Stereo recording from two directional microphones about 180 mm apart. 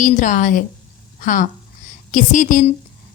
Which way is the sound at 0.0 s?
45° left (ahead or behind).